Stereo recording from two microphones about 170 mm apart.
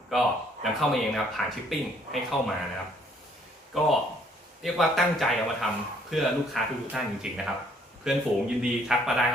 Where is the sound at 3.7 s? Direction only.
Centre (ahead or behind).